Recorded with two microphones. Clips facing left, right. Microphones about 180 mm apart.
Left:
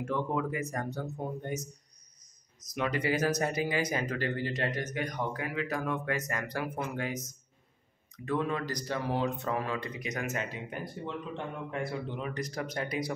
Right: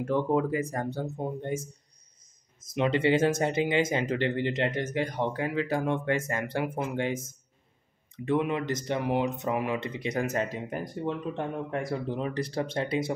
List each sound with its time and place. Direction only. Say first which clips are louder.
0.0 s speech: right 6 dB; 35° right (ahead or behind)